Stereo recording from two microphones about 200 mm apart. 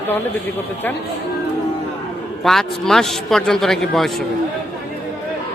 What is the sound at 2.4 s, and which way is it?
A man's voice, centre (ahead or behind).